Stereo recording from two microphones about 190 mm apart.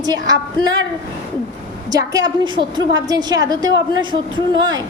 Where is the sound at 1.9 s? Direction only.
20° right (ahead or behind).